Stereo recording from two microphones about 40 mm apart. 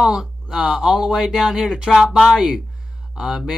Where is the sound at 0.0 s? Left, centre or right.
Centre.